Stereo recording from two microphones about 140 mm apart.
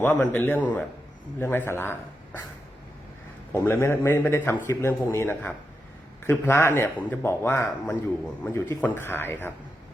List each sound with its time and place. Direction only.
0.0 s a man's voice: 15° left (ahead or behind)
3.5 s a man's voice: 15° left (ahead or behind)